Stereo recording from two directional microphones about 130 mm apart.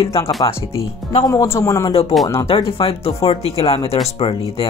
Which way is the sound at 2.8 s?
45° left (ahead or behind).